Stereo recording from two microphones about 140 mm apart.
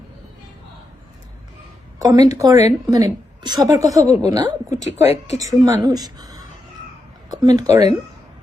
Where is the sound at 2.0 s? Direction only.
25° right (ahead or behind).